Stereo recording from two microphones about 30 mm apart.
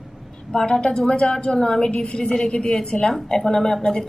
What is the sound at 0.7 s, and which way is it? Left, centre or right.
A woman's voice, left.